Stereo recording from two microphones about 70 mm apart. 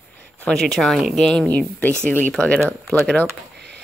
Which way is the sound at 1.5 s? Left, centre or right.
Left.